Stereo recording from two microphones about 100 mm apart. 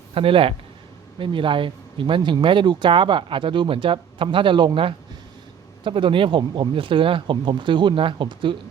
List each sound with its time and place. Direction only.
0.1 s speech: 65° right (ahead or behind)